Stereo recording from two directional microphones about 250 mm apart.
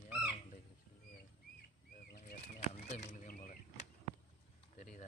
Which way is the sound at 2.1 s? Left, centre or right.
Left.